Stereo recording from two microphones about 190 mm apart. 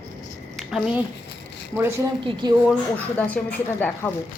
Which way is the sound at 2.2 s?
20° right (ahead or behind).